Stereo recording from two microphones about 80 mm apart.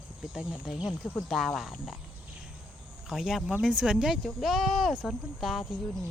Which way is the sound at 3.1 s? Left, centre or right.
Centre.